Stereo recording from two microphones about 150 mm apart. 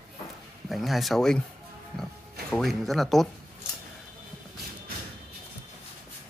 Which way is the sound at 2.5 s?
Centre (ahead or behind).